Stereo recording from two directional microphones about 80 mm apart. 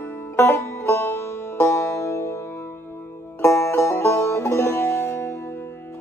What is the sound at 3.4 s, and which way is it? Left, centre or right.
Music, left.